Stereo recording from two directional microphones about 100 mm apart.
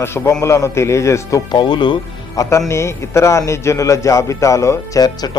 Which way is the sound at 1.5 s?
50° left (ahead or behind).